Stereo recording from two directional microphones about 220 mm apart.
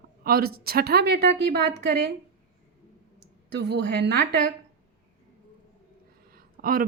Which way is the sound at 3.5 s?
50° right (ahead or behind).